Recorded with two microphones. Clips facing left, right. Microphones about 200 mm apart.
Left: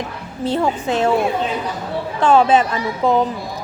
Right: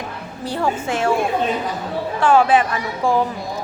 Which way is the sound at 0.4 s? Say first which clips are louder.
Left 3 dB; 20° left (ahead or behind).